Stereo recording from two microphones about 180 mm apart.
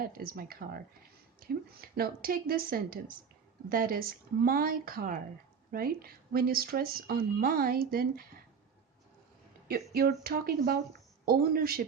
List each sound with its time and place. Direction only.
0.0 s speech: 55° right (ahead or behind)
9.6 s speech: 60° right (ahead or behind)